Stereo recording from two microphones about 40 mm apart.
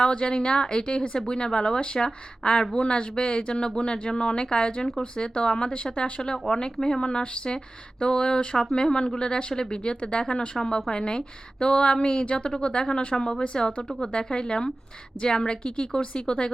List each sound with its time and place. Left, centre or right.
0.0 s a woman's voice: left